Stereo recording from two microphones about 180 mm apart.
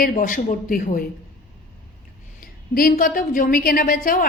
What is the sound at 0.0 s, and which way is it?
A woman's voice, 50° left (ahead or behind).